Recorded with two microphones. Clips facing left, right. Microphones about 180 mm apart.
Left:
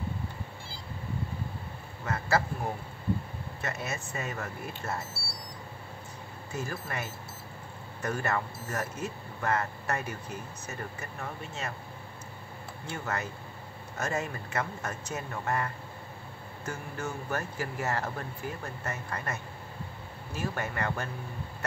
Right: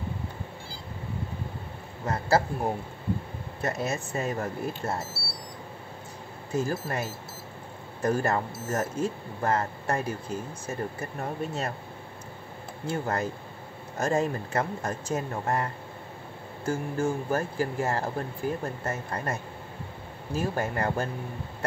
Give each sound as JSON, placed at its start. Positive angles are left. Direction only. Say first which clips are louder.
{"t": 2.0, "sound": "speech", "louder": "right 4 dB", "side_deg": -35}
{"t": 6.7, "sound": "speech", "louder": "right 6 dB", "side_deg": -35}
{"t": 12.9, "sound": "speech", "louder": "right 6 dB", "side_deg": -30}